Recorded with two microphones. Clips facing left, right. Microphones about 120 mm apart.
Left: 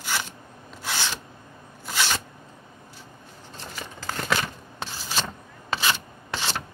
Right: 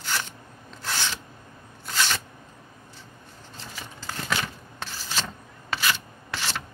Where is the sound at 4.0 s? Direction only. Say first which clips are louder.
Left 4 dB; 60° left (ahead or behind).